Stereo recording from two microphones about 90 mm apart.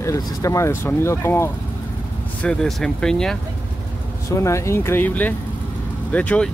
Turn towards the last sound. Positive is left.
turn(degrees=15)  # may be behind; listen again after turning